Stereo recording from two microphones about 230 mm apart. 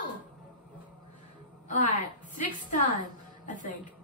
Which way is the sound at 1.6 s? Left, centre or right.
Left.